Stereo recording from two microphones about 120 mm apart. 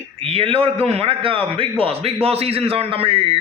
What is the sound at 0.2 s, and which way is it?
A man's voice, 50° right (ahead or behind).